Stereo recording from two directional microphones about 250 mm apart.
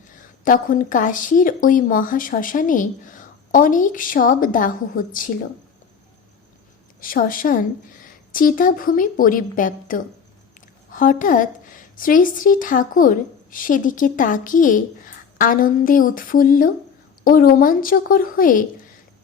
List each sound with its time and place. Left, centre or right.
0.4 s speech: left
7.0 s speech: left